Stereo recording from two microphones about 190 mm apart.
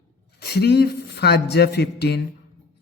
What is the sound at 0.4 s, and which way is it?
A man's voice, 60° left (ahead or behind).